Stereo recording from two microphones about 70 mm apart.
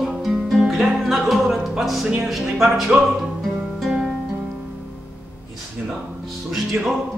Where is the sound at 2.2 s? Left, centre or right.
Centre.